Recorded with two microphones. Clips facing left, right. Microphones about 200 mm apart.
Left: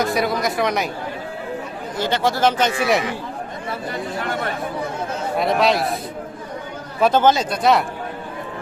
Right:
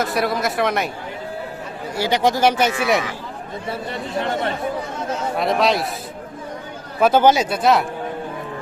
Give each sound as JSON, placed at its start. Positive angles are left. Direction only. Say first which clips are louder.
{"t": 0.0, "sound": "speech", "louder": "left 1 dB", "side_deg": 0}
{"t": 2.0, "sound": "speech", "louder": "right 2 dB", "side_deg": -15}
{"t": 4.2, "sound": "speech", "louder": "right 5 dB", "side_deg": -25}
{"t": 5.4, "sound": "speech", "louder": "left 1 dB", "side_deg": 0}
{"t": 7.0, "sound": "speech", "louder": "right 1 dB", "side_deg": -10}
{"t": 7.6, "sound": "speech", "louder": "left 1 dB", "side_deg": 0}